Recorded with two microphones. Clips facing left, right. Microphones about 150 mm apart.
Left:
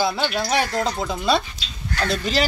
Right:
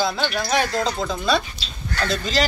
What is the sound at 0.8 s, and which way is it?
Speech, 10° left (ahead or behind).